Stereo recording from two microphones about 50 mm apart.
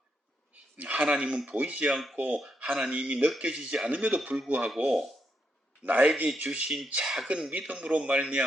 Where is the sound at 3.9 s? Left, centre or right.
Right.